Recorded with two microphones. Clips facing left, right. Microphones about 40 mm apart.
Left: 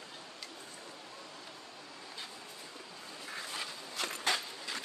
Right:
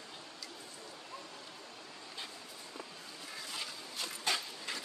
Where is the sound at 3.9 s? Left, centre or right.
Left.